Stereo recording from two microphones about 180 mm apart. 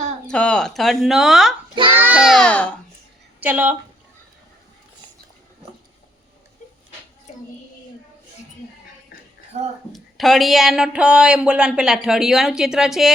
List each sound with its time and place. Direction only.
0.3 s speech: 5° left (ahead or behind)
1.7 s a child's voice: 30° right (ahead or behind)
2.0 s speech: 5° right (ahead or behind)
3.4 s speech: 10° right (ahead or behind)
9.5 s speech: 40° right (ahead or behind)
9.9 s speech: centre (ahead or behind)